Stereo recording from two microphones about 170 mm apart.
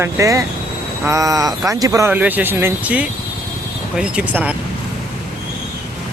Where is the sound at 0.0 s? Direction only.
20° right (ahead or behind).